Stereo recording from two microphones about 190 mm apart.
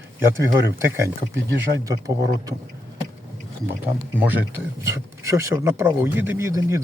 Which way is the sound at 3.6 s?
10° right (ahead or behind).